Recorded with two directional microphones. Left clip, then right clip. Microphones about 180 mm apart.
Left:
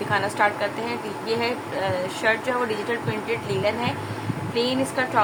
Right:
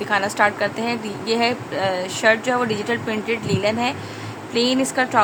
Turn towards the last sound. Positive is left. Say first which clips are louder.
# right 4 dB
turn(degrees=-70)  # may be behind; listen again after turning